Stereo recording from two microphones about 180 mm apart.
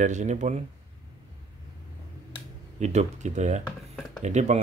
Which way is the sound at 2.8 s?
40° right (ahead or behind).